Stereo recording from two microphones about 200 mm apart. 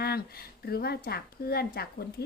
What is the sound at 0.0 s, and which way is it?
A woman's voice, 50° left (ahead or behind).